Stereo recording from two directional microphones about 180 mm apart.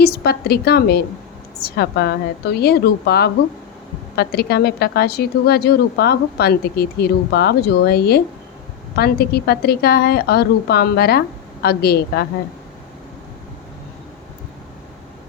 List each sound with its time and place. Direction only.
0.0 s a woman's voice: 60° left (ahead or behind)